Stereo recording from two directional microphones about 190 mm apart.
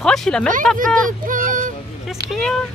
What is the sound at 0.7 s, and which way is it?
Speech, 45° right (ahead or behind).